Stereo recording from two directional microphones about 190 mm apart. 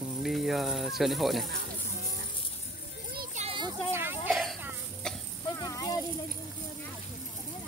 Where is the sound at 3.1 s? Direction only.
50° right (ahead or behind).